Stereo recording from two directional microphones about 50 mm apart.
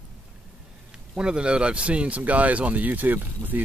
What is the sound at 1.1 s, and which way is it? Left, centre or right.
Speech, centre.